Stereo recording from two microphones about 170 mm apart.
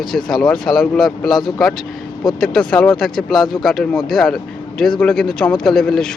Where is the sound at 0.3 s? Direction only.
Centre (ahead or behind).